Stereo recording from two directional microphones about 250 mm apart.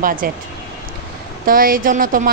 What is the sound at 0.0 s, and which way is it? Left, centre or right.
Speech, right.